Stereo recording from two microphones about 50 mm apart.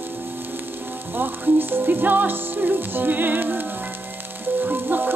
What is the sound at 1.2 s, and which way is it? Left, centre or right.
Music, right.